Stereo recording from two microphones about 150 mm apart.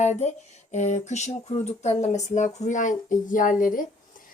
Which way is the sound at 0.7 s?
50° left (ahead or behind).